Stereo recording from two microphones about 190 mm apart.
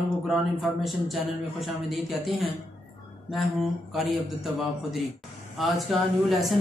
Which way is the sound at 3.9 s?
Centre (ahead or behind).